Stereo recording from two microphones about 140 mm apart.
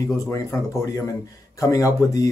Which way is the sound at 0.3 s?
25° left (ahead or behind).